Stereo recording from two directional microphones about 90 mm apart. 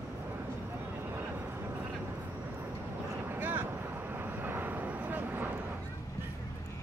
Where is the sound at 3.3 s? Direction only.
20° right (ahead or behind).